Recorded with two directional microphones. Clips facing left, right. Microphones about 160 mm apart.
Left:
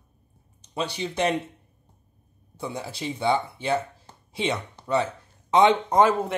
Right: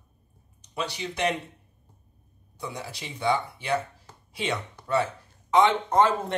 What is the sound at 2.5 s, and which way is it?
Speech, 30° left (ahead or behind).